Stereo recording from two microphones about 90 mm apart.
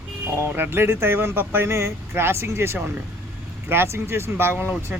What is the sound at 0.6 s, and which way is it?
Speech, 25° right (ahead or behind).